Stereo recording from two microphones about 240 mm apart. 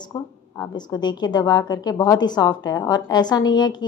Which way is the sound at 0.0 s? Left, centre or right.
Centre.